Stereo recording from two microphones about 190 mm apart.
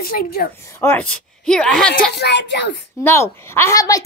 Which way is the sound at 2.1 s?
65° left (ahead or behind).